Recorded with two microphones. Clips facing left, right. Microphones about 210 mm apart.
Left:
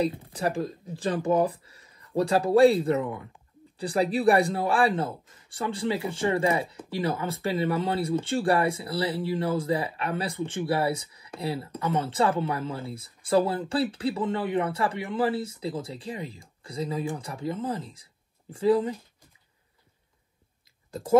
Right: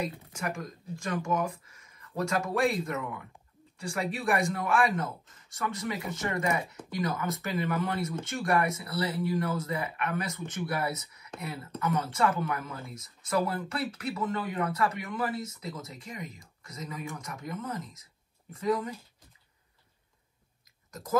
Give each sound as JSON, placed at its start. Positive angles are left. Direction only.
{"t": 0.0, "sound": "a man's voice", "side_deg": 35}
{"t": 20.9, "sound": "speech", "side_deg": 30}